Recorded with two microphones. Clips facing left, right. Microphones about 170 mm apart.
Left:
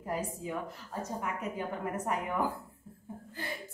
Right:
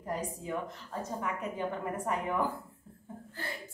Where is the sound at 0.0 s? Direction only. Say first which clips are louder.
Left 1 dB; 5° left (ahead or behind).